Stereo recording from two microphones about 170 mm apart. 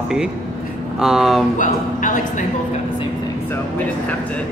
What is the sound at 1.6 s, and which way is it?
Speech, 50° left (ahead or behind).